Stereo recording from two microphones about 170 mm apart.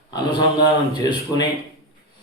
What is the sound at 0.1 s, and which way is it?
Speech, 25° left (ahead or behind).